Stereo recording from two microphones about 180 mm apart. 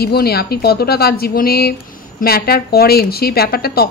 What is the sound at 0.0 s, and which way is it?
Speech, 60° left (ahead or behind).